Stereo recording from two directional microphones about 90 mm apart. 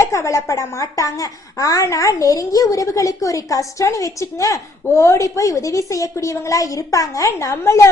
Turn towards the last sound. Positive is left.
turn(degrees=30)  # may be behind; listen again after turning